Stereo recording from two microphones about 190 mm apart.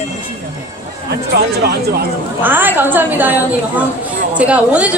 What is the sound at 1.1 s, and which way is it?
Speech, 55° right (ahead or behind).